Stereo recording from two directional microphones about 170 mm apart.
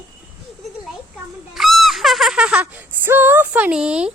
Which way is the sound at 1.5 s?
Centre (ahead or behind).